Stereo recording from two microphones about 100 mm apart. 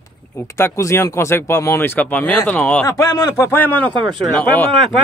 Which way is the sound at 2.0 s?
15° left (ahead or behind).